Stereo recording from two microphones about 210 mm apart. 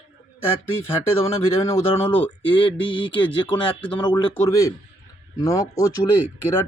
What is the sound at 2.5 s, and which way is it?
Speech, 25° left (ahead or behind).